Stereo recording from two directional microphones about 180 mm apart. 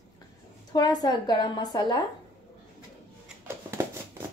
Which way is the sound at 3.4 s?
15° right (ahead or behind).